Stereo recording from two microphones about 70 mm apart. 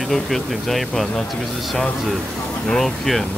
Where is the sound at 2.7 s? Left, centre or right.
Centre.